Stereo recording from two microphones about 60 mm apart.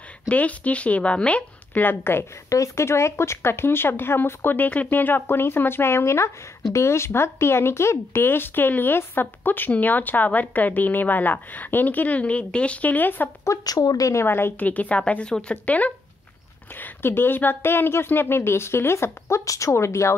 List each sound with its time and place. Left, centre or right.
0.3 s speech: left
1.8 s speech: left
2.5 s speech: left
13.5 s speech: left
13.8 s a woman's voice: left
14.1 s speech: left
14.6 s speech: left
16.8 s speech: left